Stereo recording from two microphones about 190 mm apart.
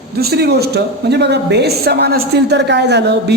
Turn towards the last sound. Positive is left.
turn(degrees=-60)  # may be behind; listen again after turning